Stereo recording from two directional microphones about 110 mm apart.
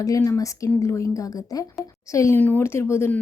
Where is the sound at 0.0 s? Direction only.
30° left (ahead or behind).